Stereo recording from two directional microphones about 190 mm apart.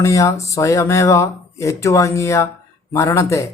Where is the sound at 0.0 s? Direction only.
15° left (ahead or behind).